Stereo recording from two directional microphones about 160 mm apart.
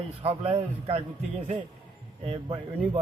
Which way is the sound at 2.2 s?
35° right (ahead or behind).